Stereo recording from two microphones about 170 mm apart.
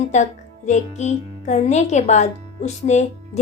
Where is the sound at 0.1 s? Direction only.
45° left (ahead or behind).